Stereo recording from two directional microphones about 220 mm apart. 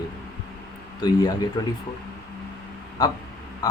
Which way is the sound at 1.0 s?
20° left (ahead or behind).